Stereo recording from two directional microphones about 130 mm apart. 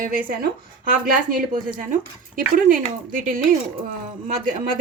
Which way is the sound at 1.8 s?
85° right.